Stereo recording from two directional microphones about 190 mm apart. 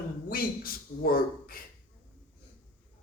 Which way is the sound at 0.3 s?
50° left (ahead or behind).